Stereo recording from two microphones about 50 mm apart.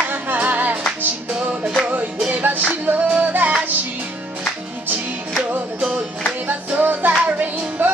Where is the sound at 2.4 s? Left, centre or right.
Right.